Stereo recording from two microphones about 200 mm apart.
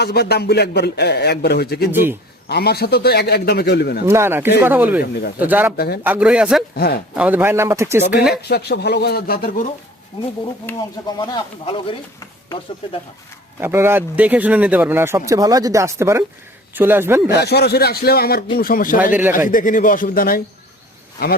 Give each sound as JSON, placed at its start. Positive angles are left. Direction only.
{"t": 0.0, "sound": "a man's voice", "side_deg": 55}
{"t": 1.9, "sound": "a man's voice", "side_deg": -10}
{"t": 2.5, "sound": "a man's voice", "side_deg": 55}
{"t": 4.0, "sound": "a man's voice", "side_deg": -10}
{"t": 5.7, "sound": "a man's voice", "side_deg": 50}
{"t": 6.0, "sound": "speech", "side_deg": -5}
{"t": 6.7, "sound": "a man's voice", "side_deg": 50}
{"t": 7.1, "sound": "a man's voice", "side_deg": -5}
{"t": 8.1, "sound": "speech", "side_deg": -5}
{"t": 8.4, "sound": "a man's voice", "side_deg": 55}
{"t": 11.0, "sound": "speech", "side_deg": 20}
{"t": 13.6, "sound": "a man's voice", "side_deg": -10}
{"t": 17.3, "sound": "a man's voice", "side_deg": 55}